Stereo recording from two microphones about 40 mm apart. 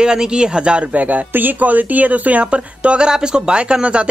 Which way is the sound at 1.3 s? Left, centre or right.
Right.